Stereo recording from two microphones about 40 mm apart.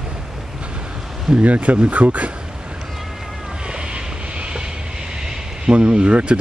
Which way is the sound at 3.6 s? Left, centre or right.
Right.